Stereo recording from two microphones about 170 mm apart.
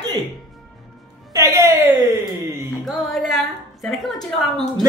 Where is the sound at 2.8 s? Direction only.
Centre (ahead or behind).